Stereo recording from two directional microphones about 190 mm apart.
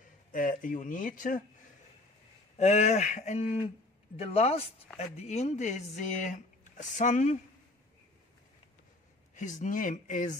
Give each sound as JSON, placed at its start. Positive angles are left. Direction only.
{"t": 0.3, "sound": "speech", "side_deg": 45}
{"t": 2.5, "sound": "speech", "side_deg": 35}
{"t": 9.3, "sound": "speech", "side_deg": 40}